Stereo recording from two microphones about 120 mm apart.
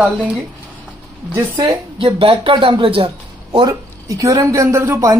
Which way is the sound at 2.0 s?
50° right (ahead or behind).